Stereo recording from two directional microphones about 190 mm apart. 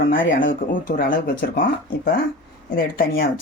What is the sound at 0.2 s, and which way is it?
Speech, 85° left.